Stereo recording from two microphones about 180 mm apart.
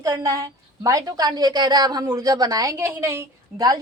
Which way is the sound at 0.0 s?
20° right (ahead or behind).